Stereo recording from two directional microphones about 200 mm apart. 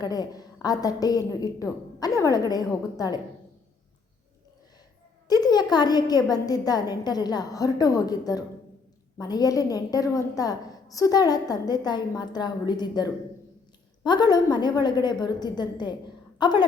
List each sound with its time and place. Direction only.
0.0 s a woman's voice: 20° left (ahead or behind)
5.3 s a sound: 20° left (ahead or behind)
5.7 s a woman's voice: 20° left (ahead or behind)